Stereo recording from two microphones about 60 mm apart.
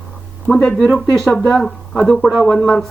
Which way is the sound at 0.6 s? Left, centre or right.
Centre.